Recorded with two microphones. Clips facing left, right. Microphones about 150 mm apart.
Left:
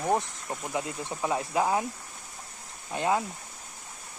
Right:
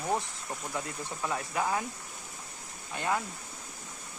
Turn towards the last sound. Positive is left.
turn(degrees=20)  # may be behind; listen again after turning